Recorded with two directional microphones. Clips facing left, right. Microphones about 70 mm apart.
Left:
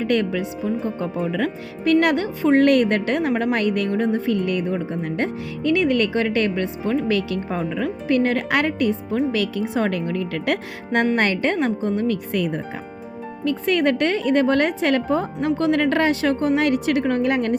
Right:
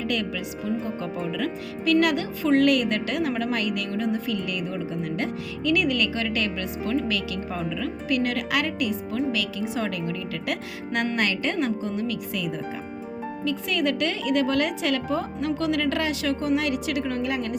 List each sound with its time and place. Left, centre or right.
0.0 s speech: left
10.9 s speech: left